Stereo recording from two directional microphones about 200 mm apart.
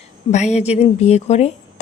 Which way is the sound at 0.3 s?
35° left (ahead or behind).